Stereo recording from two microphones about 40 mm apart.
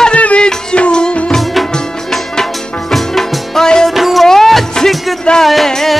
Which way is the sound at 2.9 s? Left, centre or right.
Centre.